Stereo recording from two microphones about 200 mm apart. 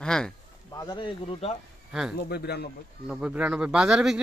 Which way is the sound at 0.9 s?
25° left (ahead or behind).